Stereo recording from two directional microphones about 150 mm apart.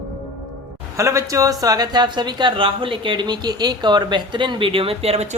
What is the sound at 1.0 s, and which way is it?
A woman's voice, 20° right (ahead or behind).